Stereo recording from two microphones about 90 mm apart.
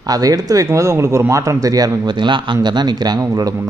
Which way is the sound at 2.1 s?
60° right (ahead or behind).